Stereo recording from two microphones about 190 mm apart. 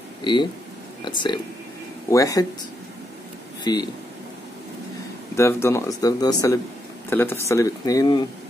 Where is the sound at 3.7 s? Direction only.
20° left (ahead or behind).